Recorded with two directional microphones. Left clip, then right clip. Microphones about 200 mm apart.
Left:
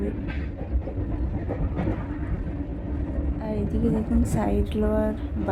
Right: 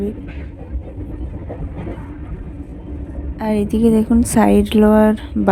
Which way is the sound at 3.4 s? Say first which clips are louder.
Right 13 dB; 55° right (ahead or behind).